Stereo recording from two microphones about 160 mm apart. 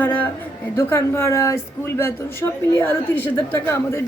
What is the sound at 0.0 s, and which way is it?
Speech, 10° left (ahead or behind).